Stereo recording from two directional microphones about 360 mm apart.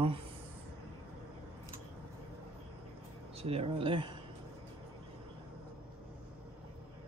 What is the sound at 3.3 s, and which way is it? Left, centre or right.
Speech, centre.